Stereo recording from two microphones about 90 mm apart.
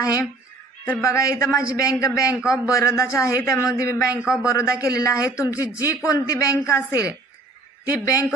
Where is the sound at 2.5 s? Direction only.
35° left (ahead or behind).